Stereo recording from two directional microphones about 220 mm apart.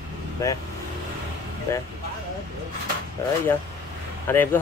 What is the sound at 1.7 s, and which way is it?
Speech, 10° left (ahead or behind).